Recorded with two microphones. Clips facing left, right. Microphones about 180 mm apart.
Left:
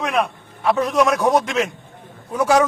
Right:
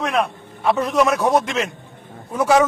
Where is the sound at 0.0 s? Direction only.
Centre (ahead or behind).